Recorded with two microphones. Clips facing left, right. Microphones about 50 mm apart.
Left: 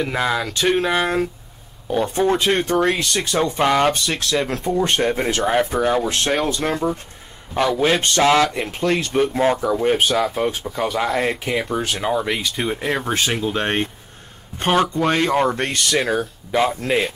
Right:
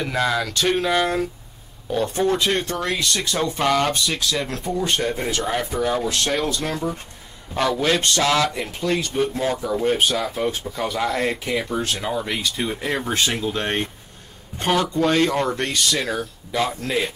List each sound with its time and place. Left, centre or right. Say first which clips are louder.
0.0 s speech: left 1 dB; centre
4.2 s speech: left 3 dB; left
8.5 s speech: left 3 dB; left
9.2 s speech: left 5 dB; left; by 13.4 s centre
13.4 s speech: left 3 dB; left
15.0 s speech: left 1 dB; left
15.7 s speech: left 2 dB; left
16.1 s speech: left 5 dB; left